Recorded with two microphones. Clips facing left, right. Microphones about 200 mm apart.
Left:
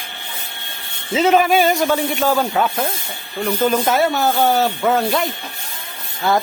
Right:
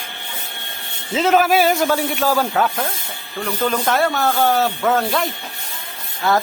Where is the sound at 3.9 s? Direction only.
Centre (ahead or behind).